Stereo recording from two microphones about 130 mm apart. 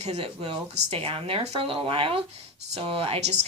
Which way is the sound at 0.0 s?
55° right (ahead or behind).